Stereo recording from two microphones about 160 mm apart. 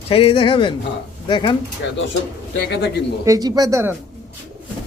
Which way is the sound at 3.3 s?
25° right (ahead or behind).